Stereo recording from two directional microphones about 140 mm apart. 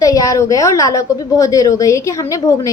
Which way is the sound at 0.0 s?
25° left (ahead or behind).